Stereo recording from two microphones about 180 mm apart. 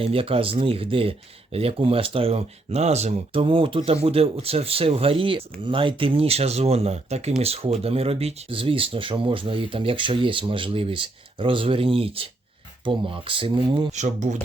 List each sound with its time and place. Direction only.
0.0 s speech: 30° right (ahead or behind)
13.9 s speech: 40° right (ahead or behind)